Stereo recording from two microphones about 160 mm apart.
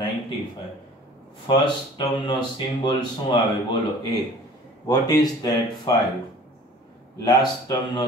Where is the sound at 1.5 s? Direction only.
30° left (ahead or behind).